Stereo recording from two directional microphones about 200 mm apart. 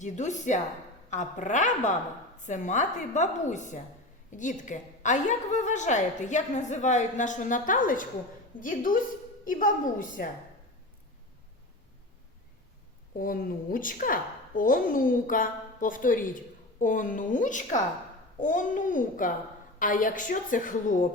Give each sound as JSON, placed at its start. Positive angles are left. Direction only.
{"t": 0.0, "sound": "a woman's voice", "side_deg": 35}
{"t": 13.1, "sound": "a woman's voice", "side_deg": 45}